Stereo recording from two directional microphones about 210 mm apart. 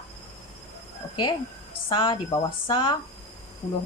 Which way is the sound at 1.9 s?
20° left (ahead or behind).